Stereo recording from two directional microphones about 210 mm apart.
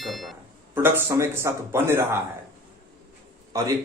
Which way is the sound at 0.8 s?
10° right (ahead or behind).